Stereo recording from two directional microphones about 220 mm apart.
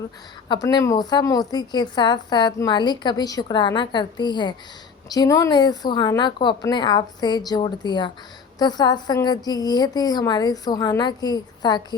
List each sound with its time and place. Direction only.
0.4 s a woman's voice: 20° left (ahead or behind)